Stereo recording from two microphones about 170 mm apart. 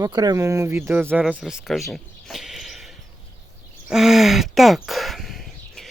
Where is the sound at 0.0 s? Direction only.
25° right (ahead or behind).